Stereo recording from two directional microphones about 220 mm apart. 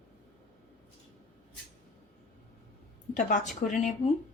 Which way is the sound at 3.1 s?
35° left (ahead or behind).